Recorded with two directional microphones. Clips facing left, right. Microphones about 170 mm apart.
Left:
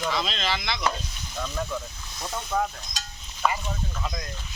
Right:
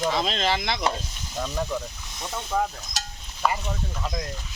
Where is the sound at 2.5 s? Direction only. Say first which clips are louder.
Right 1 dB; 10° right (ahead or behind).